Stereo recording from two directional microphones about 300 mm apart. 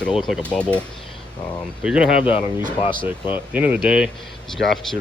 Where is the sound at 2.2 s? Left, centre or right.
Centre.